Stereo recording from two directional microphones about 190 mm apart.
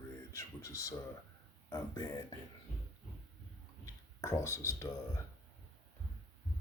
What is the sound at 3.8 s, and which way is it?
Speech, 15° left (ahead or behind).